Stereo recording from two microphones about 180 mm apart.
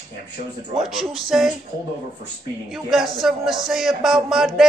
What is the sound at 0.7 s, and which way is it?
Speech, centre (ahead or behind).